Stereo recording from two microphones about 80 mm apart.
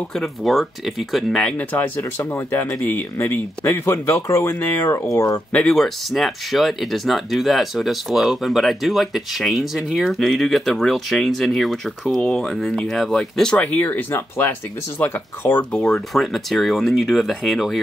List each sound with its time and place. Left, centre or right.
0.1 s speech: centre
1.4 s speech: left
5.5 s speech: centre
5.8 s speech: centre; by 15.6 s left
15.7 s speech: centre
16.1 s speech: centre